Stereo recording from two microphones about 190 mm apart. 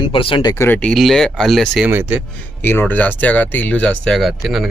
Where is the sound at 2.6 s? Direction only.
10° left (ahead or behind).